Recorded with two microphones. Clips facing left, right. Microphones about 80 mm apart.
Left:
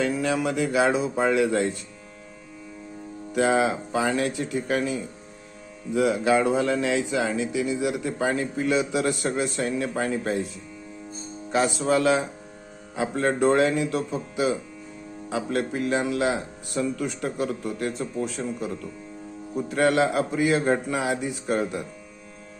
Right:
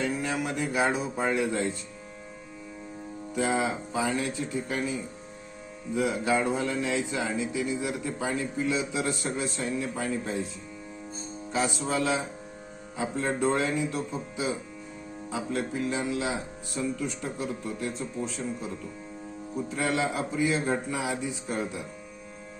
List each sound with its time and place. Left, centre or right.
0.0 s speech: left
3.3 s speech: left
11.5 s speech: left